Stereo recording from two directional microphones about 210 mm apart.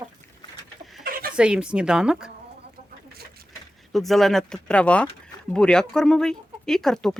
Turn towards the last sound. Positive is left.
turn(degrees=0)  # may be behind; listen again after turning